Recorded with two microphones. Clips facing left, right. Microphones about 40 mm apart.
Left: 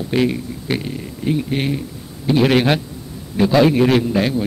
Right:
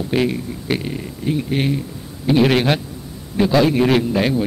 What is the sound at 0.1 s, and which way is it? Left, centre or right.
A man's voice, centre.